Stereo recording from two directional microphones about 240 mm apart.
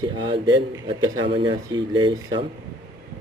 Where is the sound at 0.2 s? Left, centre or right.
Centre.